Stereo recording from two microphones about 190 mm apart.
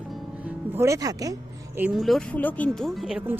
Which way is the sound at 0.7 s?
15° right (ahead or behind).